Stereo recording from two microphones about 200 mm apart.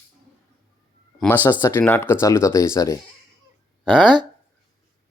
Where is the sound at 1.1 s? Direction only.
10° left (ahead or behind).